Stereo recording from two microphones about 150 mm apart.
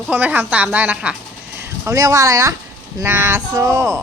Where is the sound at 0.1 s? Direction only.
10° right (ahead or behind).